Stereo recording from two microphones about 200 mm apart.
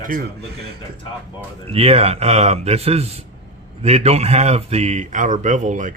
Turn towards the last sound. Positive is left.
turn(degrees=-40)  # may be behind; listen again after turning